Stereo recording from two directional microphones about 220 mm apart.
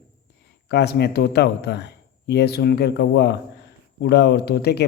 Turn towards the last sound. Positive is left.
turn(degrees=45)  # may be behind; listen again after turning